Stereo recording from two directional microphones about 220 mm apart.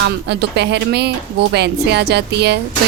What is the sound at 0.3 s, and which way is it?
Speech, 50° right (ahead or behind).